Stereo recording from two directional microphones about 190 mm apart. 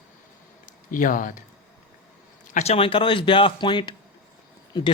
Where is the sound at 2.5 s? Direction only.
35° left (ahead or behind).